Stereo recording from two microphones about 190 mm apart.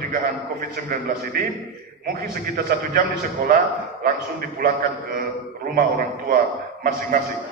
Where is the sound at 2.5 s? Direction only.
45° right (ahead or behind).